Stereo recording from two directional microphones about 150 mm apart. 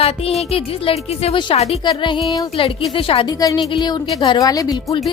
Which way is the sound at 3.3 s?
25° left (ahead or behind).